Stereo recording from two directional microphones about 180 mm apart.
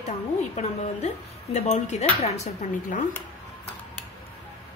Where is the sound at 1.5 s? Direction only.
40° left (ahead or behind).